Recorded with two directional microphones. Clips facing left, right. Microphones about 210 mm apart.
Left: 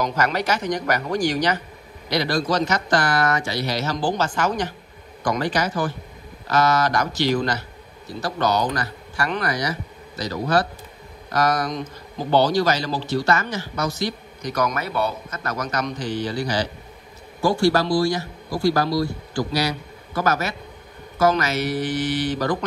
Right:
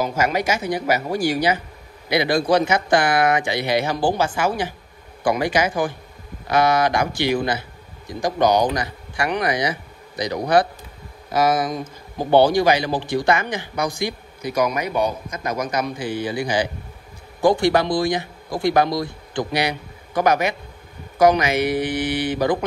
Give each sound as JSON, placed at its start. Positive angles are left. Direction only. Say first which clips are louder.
{"t": 0.0, "sound": "a man's voice", "louder": "right 2 dB", "side_deg": -10}